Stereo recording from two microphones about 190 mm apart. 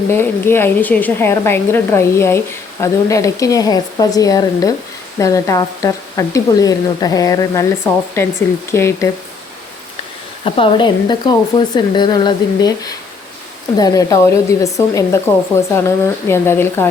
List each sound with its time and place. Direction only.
0.1 s a woman's voice: 10° left (ahead or behind)
10.4 s a woman's voice: 25° left (ahead or behind)